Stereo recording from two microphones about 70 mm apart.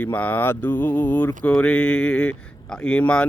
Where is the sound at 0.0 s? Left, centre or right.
Left.